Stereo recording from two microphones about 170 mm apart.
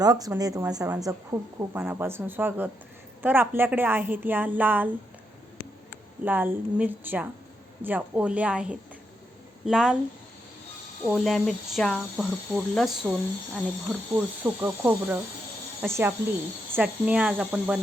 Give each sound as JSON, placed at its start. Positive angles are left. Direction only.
{"t": 0.0, "sound": "a woman's voice", "side_deg": -20}
{"t": 6.2, "sound": "a woman's voice", "side_deg": -10}
{"t": 11.1, "sound": "speech", "side_deg": 0}
{"t": 14.2, "sound": "a woman's voice", "side_deg": -10}